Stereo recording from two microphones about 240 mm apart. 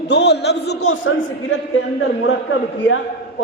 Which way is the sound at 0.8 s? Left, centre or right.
Left.